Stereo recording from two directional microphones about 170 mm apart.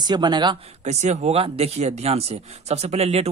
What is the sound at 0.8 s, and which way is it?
Speech, 40° right (ahead or behind).